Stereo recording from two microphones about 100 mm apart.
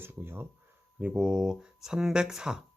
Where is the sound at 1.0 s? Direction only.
10° right (ahead or behind).